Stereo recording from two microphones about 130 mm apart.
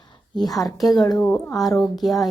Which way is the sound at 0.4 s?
30° left (ahead or behind).